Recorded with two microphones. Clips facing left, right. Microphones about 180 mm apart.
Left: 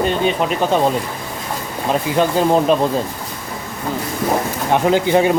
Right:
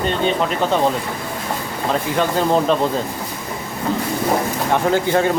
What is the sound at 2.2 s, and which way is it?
Speech, 15° left (ahead or behind).